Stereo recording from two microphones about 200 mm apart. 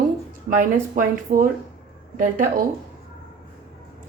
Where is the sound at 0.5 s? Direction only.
45° right (ahead or behind).